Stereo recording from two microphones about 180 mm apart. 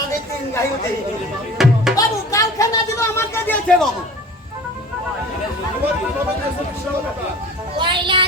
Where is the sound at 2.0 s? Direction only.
20° left (ahead or behind).